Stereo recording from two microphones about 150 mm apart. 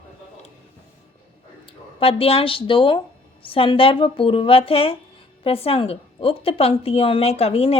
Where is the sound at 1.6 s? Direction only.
40° left (ahead or behind).